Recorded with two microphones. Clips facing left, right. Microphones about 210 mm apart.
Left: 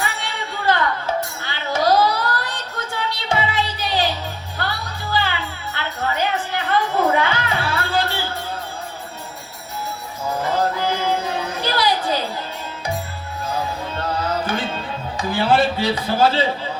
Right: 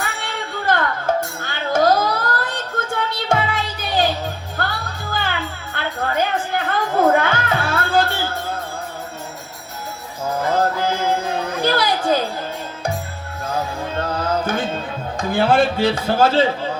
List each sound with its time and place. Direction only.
0.0 s music: 50° right (ahead or behind)
10.5 s music: 50° right (ahead or behind)
11.3 s a sound: 50° right (ahead or behind)
13.9 s music: 50° right (ahead or behind)
15.3 s a man's voice: 50° right (ahead or behind)